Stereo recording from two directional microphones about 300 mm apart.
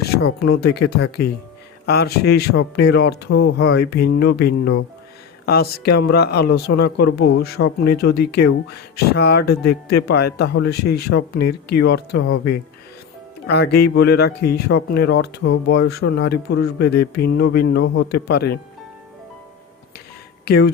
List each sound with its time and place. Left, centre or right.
0.4 s speech: left